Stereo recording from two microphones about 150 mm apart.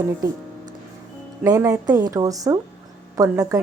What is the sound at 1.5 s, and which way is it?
A woman's voice, 20° right (ahead or behind).